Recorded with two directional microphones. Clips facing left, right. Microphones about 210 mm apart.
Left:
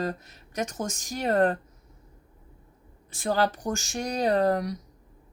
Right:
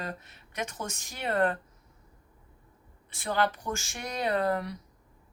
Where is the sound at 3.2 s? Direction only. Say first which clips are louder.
Left 4 dB; 40° left (ahead or behind).